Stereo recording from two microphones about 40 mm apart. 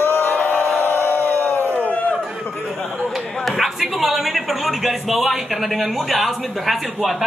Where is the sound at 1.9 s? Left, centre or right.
Left.